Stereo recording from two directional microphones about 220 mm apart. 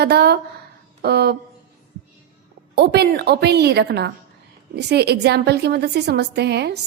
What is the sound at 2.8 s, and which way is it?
A woman's voice, 50° right (ahead or behind).